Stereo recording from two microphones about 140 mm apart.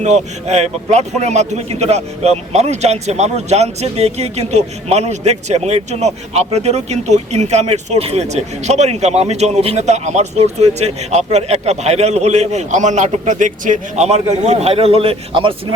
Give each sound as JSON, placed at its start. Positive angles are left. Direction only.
{"t": 0.0, "sound": "speech", "side_deg": -50}